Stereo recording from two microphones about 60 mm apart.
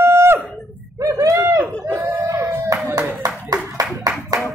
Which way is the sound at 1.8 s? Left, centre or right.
Right.